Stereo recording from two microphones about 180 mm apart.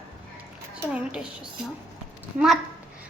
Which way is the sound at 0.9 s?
5° right (ahead or behind).